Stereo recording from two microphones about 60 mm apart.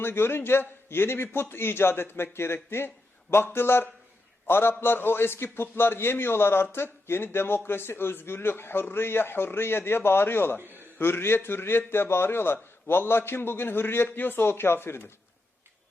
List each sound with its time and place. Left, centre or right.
0.0 s a man's voice: left